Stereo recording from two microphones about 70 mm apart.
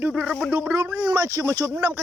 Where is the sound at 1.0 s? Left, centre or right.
Right.